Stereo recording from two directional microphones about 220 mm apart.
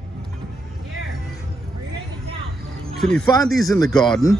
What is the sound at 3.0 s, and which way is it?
Speech, 5° left (ahead or behind).